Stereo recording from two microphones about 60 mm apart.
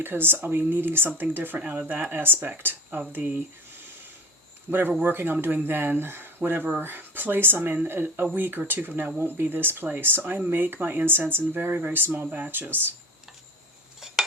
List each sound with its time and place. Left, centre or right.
0.0 s speech: right
4.7 s speech: right